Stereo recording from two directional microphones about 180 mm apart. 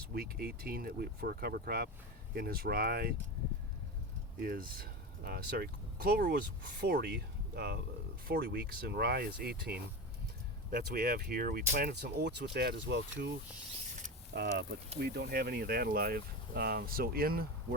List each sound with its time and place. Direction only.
0.1 s speech: 60° right (ahead or behind)
4.4 s speech: 55° right (ahead or behind); by 13.3 s 70° right (ahead or behind)
14.3 s speech: 65° right (ahead or behind)